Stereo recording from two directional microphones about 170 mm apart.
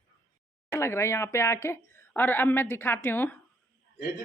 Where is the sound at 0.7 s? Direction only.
15° left (ahead or behind).